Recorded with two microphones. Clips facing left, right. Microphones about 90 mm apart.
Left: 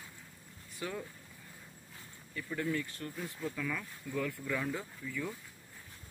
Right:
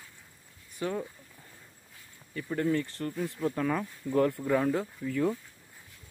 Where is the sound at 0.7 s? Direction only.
25° right (ahead or behind).